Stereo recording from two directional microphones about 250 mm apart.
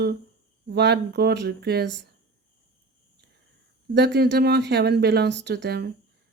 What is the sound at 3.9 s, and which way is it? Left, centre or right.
Speech, right.